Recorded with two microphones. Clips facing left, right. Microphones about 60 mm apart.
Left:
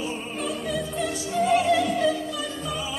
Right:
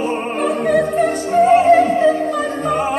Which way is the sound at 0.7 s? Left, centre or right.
Right.